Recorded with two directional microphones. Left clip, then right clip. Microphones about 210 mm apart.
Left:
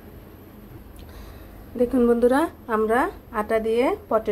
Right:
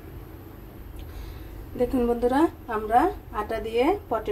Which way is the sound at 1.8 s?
25° left (ahead or behind).